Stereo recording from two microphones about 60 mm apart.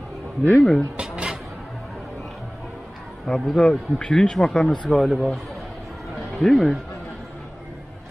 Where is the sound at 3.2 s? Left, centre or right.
Centre.